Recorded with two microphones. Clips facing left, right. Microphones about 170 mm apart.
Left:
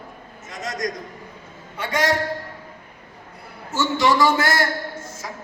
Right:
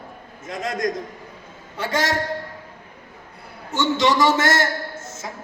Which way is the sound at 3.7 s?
20° right (ahead or behind).